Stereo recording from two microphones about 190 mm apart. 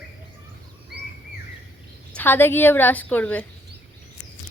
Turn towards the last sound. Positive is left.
turn(degrees=10)  # may be behind; listen again after turning